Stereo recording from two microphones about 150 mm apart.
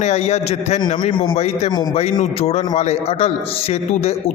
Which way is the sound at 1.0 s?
35° left (ahead or behind).